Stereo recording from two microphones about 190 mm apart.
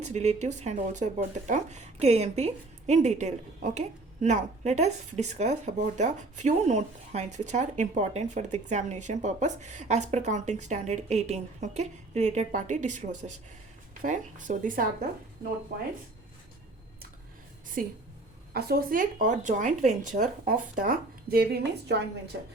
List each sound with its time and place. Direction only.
0.0 s speech: 35° right (ahead or behind)
17.8 s a woman's voice: 45° right (ahead or behind)